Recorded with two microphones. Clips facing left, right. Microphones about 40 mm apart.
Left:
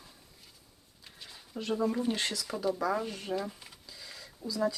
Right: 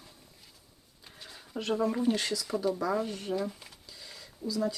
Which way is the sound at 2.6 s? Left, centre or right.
Centre.